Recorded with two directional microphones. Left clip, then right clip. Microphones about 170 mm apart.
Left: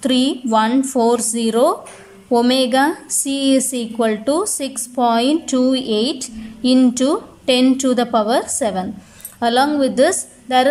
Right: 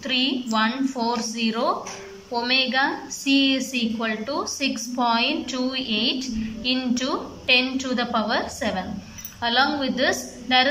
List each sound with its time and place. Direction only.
0.0 s a woman's voice: 40° left (ahead or behind)